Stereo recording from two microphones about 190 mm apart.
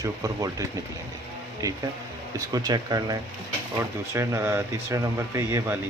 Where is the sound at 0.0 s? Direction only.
20° right (ahead or behind).